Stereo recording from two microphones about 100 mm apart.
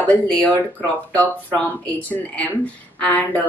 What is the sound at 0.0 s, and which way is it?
Speech, 15° left (ahead or behind).